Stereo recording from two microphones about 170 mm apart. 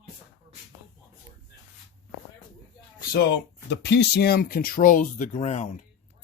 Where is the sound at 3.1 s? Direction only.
70° left (ahead or behind).